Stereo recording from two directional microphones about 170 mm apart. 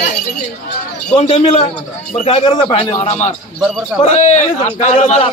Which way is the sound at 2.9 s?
40° left (ahead or behind).